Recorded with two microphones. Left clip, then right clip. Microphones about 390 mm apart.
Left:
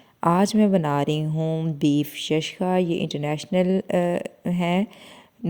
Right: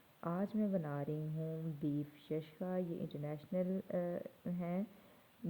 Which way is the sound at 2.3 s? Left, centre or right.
Left.